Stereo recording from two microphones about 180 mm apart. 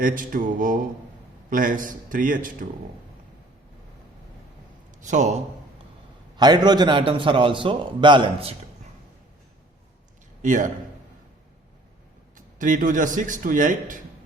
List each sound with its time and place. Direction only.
0.0 s a man's voice: 50° right (ahead or behind)
4.9 s a man's voice: 40° right (ahead or behind)
6.3 s a man's voice: 25° right (ahead or behind)
10.4 s a man's voice: 45° right (ahead or behind)
12.5 s a man's voice: 45° right (ahead or behind)